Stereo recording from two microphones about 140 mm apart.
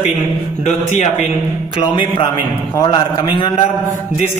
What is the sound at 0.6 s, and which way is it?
Speech, 55° left (ahead or behind).